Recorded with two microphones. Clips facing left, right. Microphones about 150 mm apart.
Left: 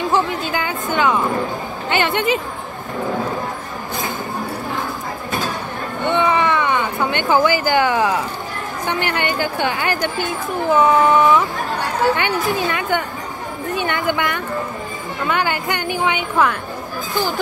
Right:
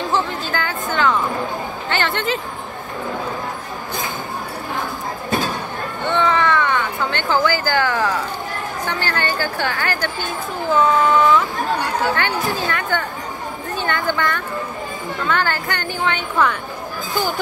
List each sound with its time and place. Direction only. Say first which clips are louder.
0.1 s a woman's voice: left 2 dB; 15° left (ahead or behind)
6.0 s a sound: left 1 dB; 20° left (ahead or behind)
8.8 s speech: left 3 dB; 20° left (ahead or behind)
12.4 s a woman's voice: left 2 dB; 20° left (ahead or behind)